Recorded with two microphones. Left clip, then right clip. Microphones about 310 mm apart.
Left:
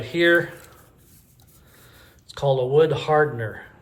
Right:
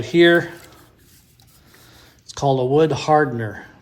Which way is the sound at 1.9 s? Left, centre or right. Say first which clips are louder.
Right 3 dB; centre.